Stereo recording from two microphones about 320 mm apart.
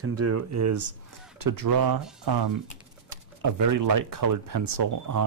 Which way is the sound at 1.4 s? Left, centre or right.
Right.